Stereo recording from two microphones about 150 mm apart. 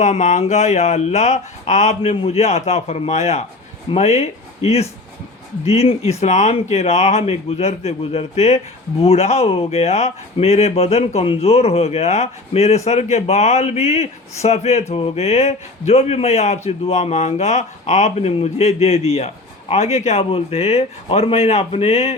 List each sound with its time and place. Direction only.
0.0 s speech: 50° left (ahead or behind)